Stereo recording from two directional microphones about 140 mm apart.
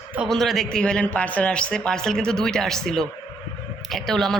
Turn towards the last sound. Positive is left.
turn(degrees=5)  # may be behind; listen again after turning